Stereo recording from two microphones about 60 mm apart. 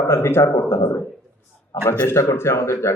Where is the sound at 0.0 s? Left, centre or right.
Left.